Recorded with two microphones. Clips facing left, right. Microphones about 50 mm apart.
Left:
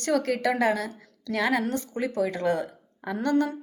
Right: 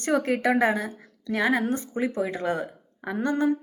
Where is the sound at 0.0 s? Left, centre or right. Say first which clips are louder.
Right 1 dB; right.